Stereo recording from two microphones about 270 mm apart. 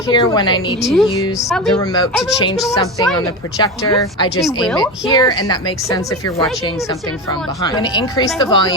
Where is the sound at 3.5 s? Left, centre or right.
Centre.